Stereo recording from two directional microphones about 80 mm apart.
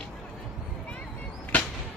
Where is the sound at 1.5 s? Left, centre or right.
Centre.